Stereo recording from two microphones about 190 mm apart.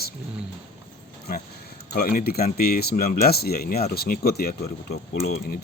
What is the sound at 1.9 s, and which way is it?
Speech, 50° left (ahead or behind).